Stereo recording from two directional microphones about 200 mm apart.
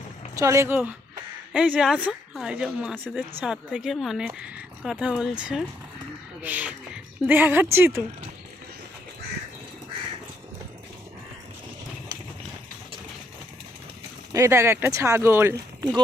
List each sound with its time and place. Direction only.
0.3 s speech: 15° right (ahead or behind)
14.3 s speech: 15° right (ahead or behind)